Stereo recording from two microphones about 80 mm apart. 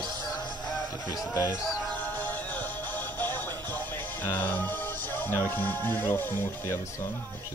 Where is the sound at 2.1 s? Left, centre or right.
Left.